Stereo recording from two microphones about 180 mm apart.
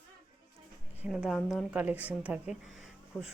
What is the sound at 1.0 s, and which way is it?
A woman's voice, 5° right (ahead or behind).